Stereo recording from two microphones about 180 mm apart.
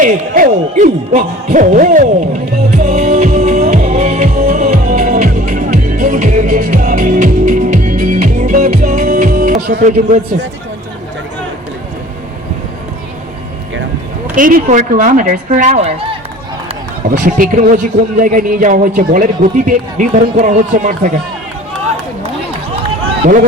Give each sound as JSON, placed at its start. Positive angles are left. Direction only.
{"t": 0.0, "sound": "music", "side_deg": -50}
{"t": 14.3, "sound": "a man's voice", "side_deg": -50}
{"t": 17.1, "sound": "a man's voice", "side_deg": -50}